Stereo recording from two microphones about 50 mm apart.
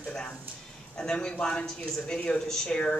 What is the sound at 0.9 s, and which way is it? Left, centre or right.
Speech, centre.